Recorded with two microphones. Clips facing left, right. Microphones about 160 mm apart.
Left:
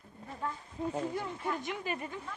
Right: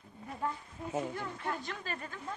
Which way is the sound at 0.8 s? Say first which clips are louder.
Left 3 dB; 25° left (ahead or behind).